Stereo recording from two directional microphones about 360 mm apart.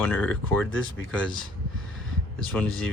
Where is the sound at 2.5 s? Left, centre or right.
Centre.